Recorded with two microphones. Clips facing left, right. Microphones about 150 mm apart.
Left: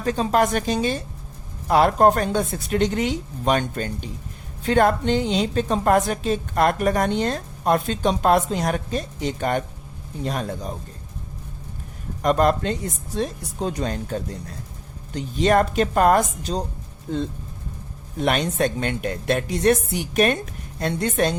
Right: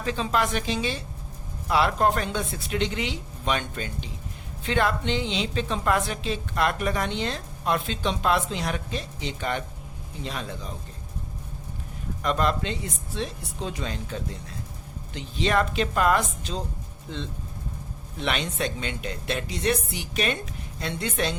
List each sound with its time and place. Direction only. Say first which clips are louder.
0.0 s a woman's voice: left 6 dB; 45° left (ahead or behind)
12.2 s a woman's voice: left 6 dB; 45° left (ahead or behind)